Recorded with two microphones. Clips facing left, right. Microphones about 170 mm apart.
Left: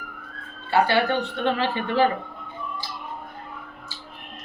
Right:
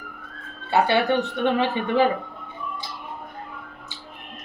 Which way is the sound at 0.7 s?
20° right (ahead or behind).